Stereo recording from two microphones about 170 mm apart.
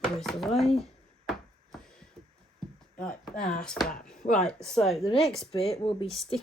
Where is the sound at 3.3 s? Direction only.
55° left (ahead or behind).